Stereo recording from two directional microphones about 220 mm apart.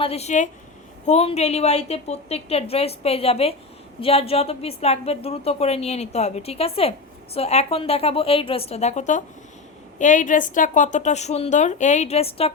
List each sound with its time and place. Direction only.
0.0 s a woman's voice: 30° left (ahead or behind)